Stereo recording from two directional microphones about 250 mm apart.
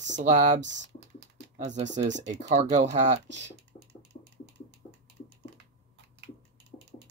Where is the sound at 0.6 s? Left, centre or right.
Right.